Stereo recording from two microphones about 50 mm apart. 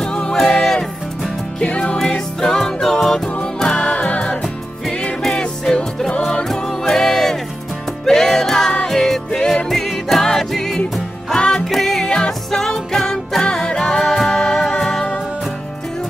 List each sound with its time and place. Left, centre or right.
0.0 s music: centre
3.7 s music: left; by 13.4 s centre
13.4 s music: centre